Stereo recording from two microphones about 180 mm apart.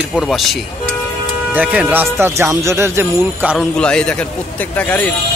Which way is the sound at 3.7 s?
5° left (ahead or behind).